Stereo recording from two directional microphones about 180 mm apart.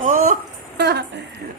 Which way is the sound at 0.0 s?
50° right (ahead or behind).